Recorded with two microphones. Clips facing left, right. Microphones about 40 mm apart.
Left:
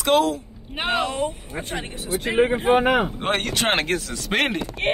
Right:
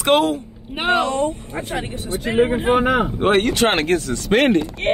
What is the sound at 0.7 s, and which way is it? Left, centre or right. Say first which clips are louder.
Speech: right 5 dB; centre.